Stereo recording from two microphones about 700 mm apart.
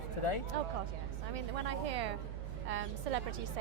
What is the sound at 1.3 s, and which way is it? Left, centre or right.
A woman's voice, right.